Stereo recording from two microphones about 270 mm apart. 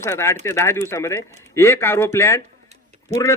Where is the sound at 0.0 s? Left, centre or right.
Centre.